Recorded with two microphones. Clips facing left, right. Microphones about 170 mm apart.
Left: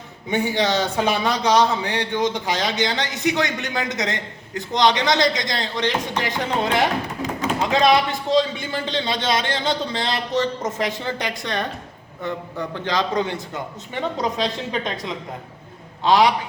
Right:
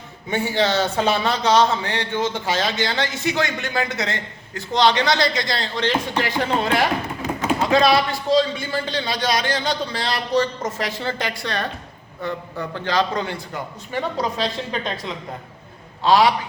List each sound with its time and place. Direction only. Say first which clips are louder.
0.3 s a man's voice: even; 15° left (ahead or behind)